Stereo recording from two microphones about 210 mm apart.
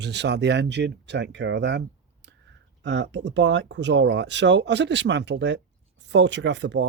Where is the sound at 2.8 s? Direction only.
55° right (ahead or behind).